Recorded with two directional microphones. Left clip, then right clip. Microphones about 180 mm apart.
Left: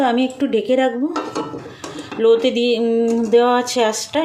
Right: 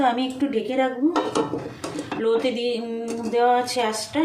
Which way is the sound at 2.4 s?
60° left (ahead or behind).